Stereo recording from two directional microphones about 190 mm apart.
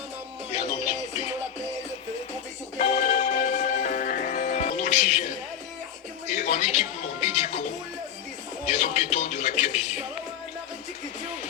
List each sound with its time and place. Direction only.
0.5 s music: 35° left (ahead or behind)
2.7 s music: 40° left (ahead or behind)
6.4 s music: 35° left (ahead or behind)
8.6 s music: 35° left (ahead or behind)